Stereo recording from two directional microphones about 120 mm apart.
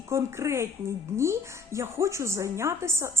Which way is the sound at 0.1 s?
20° right (ahead or behind).